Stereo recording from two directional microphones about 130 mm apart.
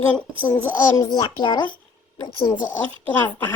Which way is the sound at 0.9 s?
30° left (ahead or behind).